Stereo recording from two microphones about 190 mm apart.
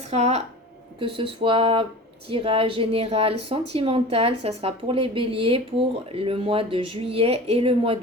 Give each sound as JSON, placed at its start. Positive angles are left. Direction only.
{"t": 0.1, "sound": "a woman's voice", "side_deg": -35}